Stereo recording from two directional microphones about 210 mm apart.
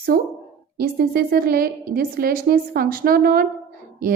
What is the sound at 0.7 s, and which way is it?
A woman's voice, 45° right (ahead or behind).